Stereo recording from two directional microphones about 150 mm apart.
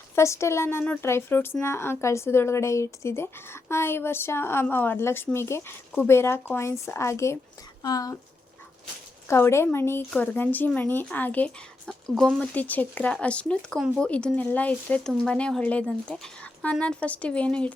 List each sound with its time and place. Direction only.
0.2 s speech: 20° left (ahead or behind)
9.2 s speech: 20° left (ahead or behind)